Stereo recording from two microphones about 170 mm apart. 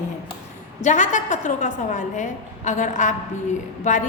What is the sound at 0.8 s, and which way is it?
A woman's voice, 45° left (ahead or behind).